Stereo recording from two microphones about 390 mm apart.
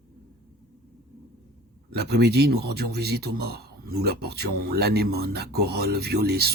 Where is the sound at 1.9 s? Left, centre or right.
Right.